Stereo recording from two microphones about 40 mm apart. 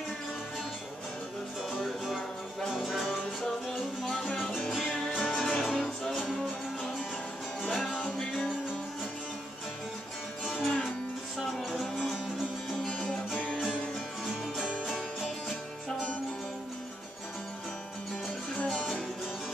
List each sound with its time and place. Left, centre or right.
1.8 s music: centre
4.7 s music: centre
5.2 s music: centre
7.6 s music: centre
10.4 s music: centre
12.8 s music: left
14.2 s music: centre